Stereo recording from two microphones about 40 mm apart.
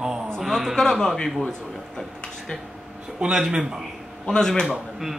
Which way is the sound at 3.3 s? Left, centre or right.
Centre.